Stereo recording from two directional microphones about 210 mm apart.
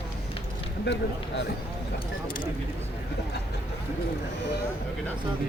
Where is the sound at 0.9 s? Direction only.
55° left (ahead or behind).